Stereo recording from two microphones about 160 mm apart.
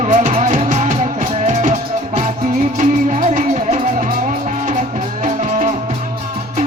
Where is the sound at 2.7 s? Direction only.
50° right (ahead or behind).